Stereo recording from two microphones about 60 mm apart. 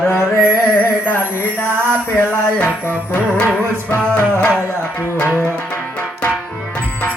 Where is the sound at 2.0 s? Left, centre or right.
Left.